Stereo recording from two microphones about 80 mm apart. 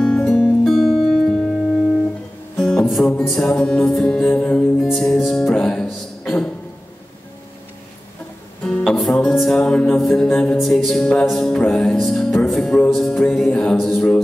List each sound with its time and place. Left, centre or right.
0.0 s music: centre
8.6 s music: centre